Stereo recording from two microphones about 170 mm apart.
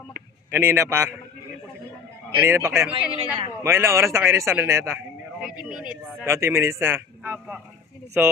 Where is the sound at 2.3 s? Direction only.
15° right (ahead or behind).